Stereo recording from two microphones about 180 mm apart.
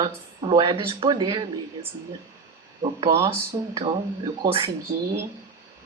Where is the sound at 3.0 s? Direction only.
20° right (ahead or behind).